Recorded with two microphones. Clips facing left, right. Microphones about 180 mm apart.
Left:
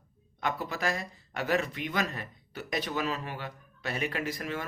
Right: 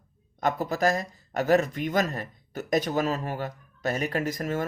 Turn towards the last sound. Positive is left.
turn(degrees=-45)  # may be behind; listen again after turning